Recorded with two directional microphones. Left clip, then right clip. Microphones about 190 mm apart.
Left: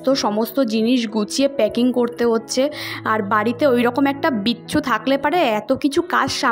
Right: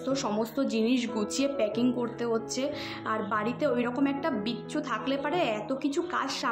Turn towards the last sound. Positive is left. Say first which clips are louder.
# left 12 dB
turn(degrees=45)  # may be behind; listen again after turning